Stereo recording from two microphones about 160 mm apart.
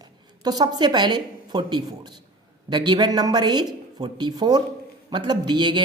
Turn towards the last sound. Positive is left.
turn(degrees=-30)  # may be behind; listen again after turning